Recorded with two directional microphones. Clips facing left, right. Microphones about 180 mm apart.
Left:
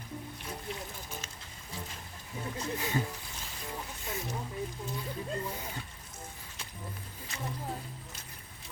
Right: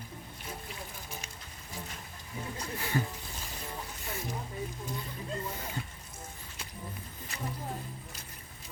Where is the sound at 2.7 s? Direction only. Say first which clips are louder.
Right 1 dB; 20° left (ahead or behind).